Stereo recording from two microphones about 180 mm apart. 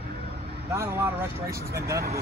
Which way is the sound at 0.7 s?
15° right (ahead or behind).